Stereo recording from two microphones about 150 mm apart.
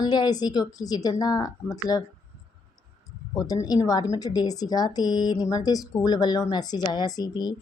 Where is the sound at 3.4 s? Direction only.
25° left (ahead or behind).